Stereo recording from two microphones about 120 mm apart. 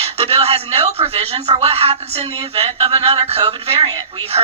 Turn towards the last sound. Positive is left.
turn(degrees=-50)  # may be behind; listen again after turning